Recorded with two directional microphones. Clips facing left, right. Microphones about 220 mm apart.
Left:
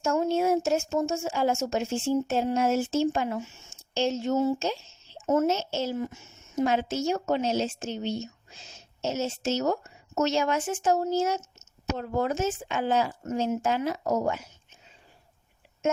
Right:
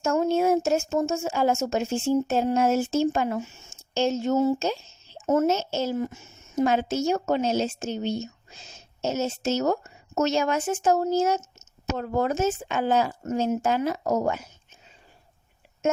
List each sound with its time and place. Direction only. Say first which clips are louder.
0.0 s speech: right 2 dB; 45° right (ahead or behind)